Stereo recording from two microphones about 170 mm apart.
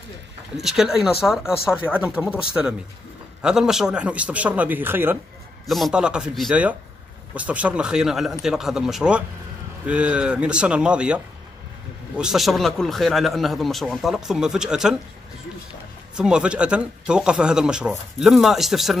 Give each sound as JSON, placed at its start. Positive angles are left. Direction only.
{"t": 0.6, "sound": "speech", "side_deg": 0}
{"t": 5.7, "sound": "speech", "side_deg": 0}
{"t": 16.2, "sound": "speech", "side_deg": -5}